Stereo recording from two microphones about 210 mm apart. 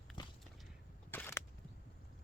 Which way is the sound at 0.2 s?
20° left (ahead or behind).